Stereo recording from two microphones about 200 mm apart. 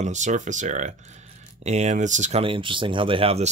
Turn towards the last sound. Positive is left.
turn(degrees=-30)  # may be behind; listen again after turning